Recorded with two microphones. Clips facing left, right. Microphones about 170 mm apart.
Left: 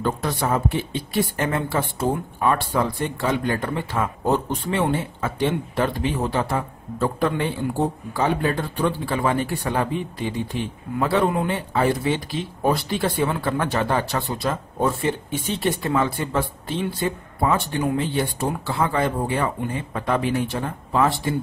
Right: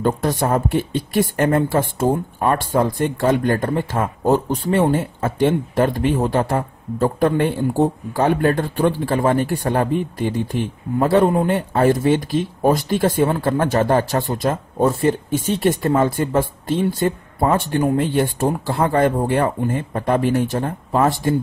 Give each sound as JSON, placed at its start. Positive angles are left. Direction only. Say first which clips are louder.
{"t": 0.0, "sound": "speech", "louder": "right 5 dB", "side_deg": -45}